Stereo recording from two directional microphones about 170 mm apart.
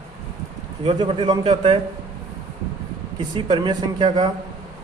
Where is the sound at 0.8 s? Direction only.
25° right (ahead or behind).